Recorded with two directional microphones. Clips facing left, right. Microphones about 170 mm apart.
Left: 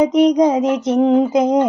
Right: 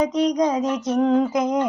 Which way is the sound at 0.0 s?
25° left (ahead or behind).